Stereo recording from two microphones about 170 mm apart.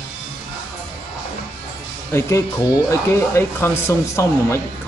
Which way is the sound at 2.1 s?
15° left (ahead or behind).